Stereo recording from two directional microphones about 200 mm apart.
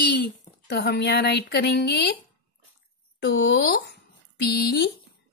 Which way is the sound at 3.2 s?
55° left (ahead or behind).